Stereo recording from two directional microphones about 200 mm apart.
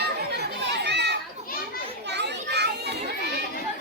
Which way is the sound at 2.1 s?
60° right (ahead or behind).